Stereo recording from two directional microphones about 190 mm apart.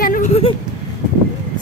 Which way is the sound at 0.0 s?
45° left (ahead or behind).